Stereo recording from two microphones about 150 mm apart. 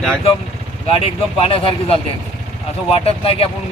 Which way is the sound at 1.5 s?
40° left (ahead or behind).